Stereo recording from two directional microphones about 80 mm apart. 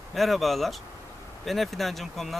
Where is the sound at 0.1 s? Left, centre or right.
Centre.